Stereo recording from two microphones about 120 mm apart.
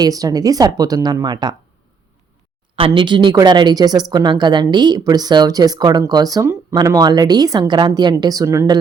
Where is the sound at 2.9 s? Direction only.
40° right (ahead or behind).